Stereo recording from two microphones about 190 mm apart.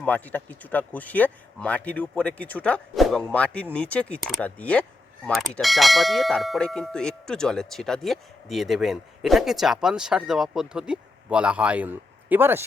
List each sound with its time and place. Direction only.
0.0 s speech: 10° left (ahead or behind); by 12.6 s 10° right (ahead or behind)